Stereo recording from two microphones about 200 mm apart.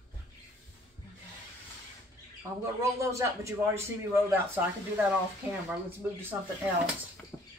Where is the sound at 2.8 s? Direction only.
15° right (ahead or behind).